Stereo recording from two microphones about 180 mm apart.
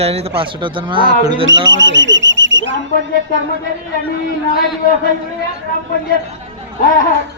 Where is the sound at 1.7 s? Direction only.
90° right.